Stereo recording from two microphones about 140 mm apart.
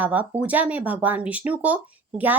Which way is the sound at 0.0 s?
10° right (ahead or behind).